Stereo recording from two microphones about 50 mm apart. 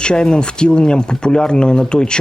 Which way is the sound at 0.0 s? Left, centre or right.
Centre.